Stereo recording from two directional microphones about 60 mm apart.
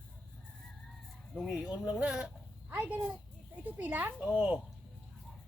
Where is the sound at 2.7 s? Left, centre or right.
Right.